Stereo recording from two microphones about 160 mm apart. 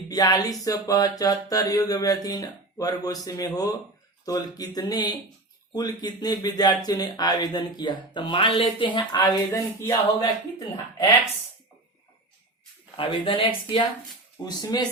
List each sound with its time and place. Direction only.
0.1 s speech: 25° left (ahead or behind)
13.0 s speech: 35° left (ahead or behind)